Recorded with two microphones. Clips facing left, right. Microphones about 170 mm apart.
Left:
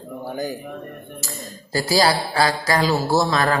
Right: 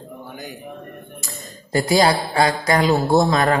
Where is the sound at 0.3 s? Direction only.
40° left (ahead or behind).